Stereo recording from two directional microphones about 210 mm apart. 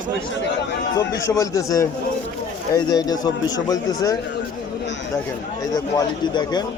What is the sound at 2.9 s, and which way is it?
Speech, 20° left (ahead or behind).